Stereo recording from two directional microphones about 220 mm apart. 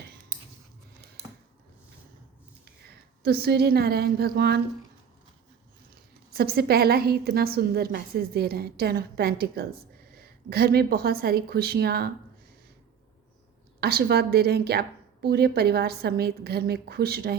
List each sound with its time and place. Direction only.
3.2 s a woman's voice: 45° right (ahead or behind)
6.3 s a woman's voice: 45° right (ahead or behind)
13.8 s a woman's voice: 45° right (ahead or behind)